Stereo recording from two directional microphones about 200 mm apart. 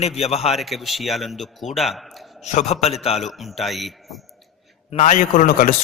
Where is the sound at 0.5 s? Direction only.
Centre (ahead or behind).